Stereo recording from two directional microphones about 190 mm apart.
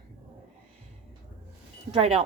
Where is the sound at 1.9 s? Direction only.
30° right (ahead or behind).